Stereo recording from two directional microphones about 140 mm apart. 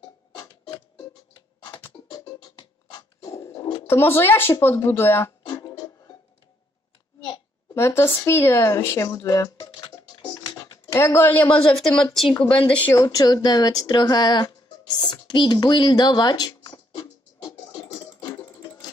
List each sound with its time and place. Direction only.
0.4 s music: 25° left (ahead or behind)
2.0 s music: 25° left (ahead or behind)
2.9 s a sound: 30° left (ahead or behind)
5.5 s music: 20° left (ahead or behind)
7.7 s speech: 15° left (ahead or behind)
10.2 s music: 25° left (ahead or behind)
10.9 s speech: 20° left (ahead or behind); by 12.4 s centre (ahead or behind)
12.9 s speech: 25° left (ahead or behind)
15.0 s a sound: 35° left (ahead or behind)